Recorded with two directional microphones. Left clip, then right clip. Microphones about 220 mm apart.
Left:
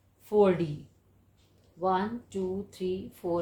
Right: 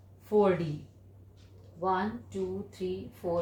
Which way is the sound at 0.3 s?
40° left (ahead or behind).